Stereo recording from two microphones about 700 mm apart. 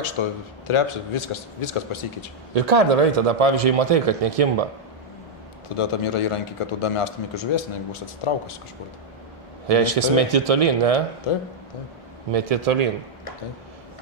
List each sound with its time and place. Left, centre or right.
0.2 s a man's voice: left
2.5 s a man's voice: right
5.8 s a man's voice: left
9.7 s speech: right
12.3 s a man's voice: right